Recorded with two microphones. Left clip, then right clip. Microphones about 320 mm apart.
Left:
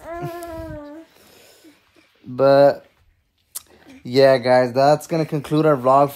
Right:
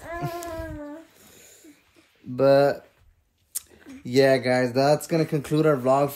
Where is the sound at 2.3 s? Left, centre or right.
Centre.